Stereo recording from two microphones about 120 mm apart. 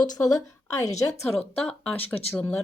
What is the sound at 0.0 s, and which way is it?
Speech, 30° left (ahead or behind).